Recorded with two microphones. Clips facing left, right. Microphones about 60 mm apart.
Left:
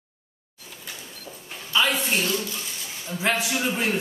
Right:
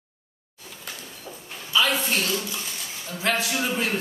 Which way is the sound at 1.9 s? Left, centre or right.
Centre.